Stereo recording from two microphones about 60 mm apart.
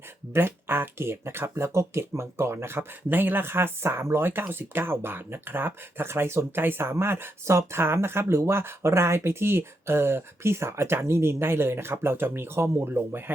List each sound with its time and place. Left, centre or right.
0.3 s speech: right